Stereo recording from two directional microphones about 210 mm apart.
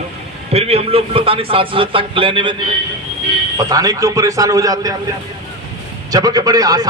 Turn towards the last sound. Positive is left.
turn(degrees=-15)  # may be behind; listen again after turning